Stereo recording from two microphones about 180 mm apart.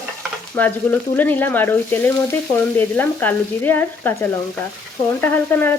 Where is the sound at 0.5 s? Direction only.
10° left (ahead or behind).